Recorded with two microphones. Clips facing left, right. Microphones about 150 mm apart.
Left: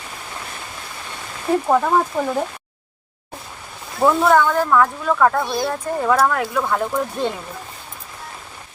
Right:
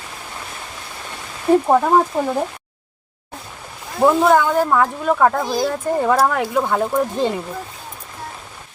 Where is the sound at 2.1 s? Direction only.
20° right (ahead or behind).